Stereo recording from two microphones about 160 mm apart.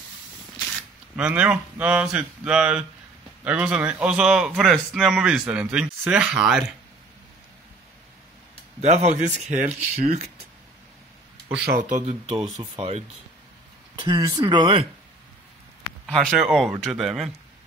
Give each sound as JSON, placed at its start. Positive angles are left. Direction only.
{"t": 1.1, "sound": "a man's voice", "side_deg": -5}
{"t": 8.8, "sound": "speech", "side_deg": -45}
{"t": 11.6, "sound": "speech", "side_deg": -55}
{"t": 12.5, "sound": "speech", "side_deg": -35}
{"t": 13.9, "sound": "speech", "side_deg": -25}
{"t": 16.1, "sound": "a man's voice", "side_deg": 5}